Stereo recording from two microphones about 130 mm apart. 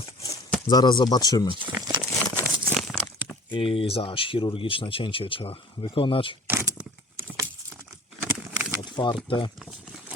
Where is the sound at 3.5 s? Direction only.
45° left (ahead or behind).